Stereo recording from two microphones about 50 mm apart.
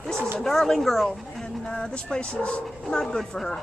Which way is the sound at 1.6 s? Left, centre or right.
Centre.